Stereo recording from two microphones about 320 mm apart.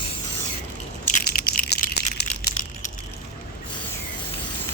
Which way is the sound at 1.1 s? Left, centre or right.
Left.